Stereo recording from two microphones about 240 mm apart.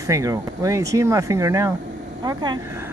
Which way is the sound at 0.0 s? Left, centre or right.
Centre.